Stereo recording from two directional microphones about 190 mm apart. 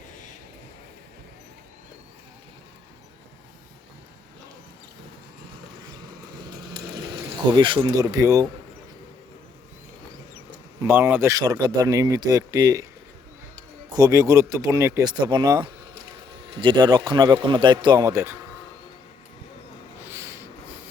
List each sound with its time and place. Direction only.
6.7 s a sound: 25° right (ahead or behind)
10.8 s speech: 10° right (ahead or behind)
13.9 s speech: 20° right (ahead or behind)
20.1 s snort: 15° right (ahead or behind)